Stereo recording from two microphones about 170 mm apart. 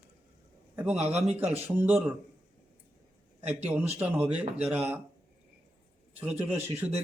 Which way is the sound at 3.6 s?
10° right (ahead or behind).